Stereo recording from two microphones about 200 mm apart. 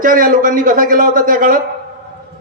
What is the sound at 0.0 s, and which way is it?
A man's voice, 45° right (ahead or behind).